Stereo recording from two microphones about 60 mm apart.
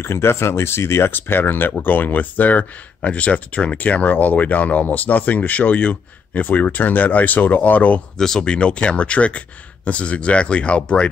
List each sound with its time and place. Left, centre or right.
0.0 s speech: left
8.2 s speech: centre